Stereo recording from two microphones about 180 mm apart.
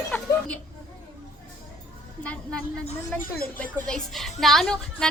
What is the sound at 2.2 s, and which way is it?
A woman's voice, 5° left (ahead or behind).